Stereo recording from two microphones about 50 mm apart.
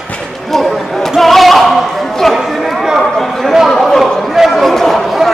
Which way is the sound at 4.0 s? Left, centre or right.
Centre.